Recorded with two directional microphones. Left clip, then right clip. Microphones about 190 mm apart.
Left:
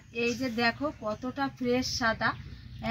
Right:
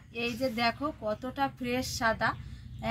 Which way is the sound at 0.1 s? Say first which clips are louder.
Left 1 dB; 10° right (ahead or behind).